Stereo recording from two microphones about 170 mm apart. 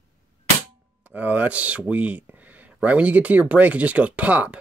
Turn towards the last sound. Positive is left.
turn(degrees=-10)  # may be behind; listen again after turning